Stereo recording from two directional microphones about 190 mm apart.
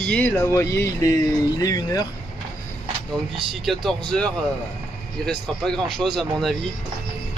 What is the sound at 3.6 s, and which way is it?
Speech, centre (ahead or behind).